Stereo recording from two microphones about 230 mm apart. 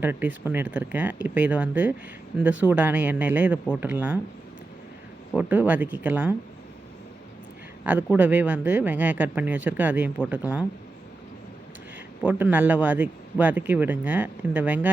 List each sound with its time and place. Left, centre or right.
0.0 s speech: centre
5.4 s speech: centre
7.9 s speech: centre
12.2 s speech: centre